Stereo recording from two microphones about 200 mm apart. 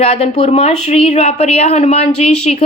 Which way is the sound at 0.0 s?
30° left (ahead or behind).